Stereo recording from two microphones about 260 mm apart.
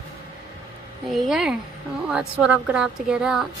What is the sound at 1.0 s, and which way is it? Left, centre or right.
A woman's voice, centre.